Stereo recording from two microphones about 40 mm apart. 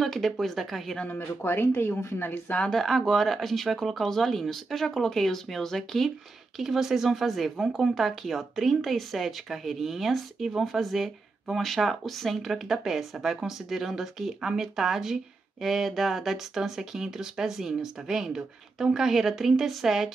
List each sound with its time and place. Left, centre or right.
0.0 s speech: centre
1.1 s speech: left
2.7 s speech: centre
6.6 s speech: centre